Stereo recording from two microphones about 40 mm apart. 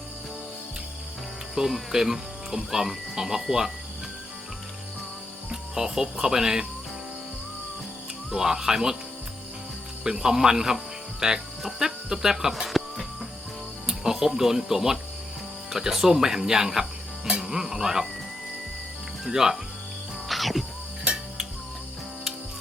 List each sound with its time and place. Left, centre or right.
1.5 s speech: centre
5.5 s speech: centre
8.3 s speech: centre
10.0 s speech: centre
17.2 s music: centre
19.2 s speech: centre
20.2 s music: centre
21.0 s music: right